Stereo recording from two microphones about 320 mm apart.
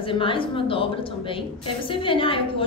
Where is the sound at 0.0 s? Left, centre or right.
Centre.